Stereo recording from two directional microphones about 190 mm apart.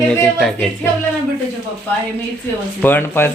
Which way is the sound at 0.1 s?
5° left (ahead or behind).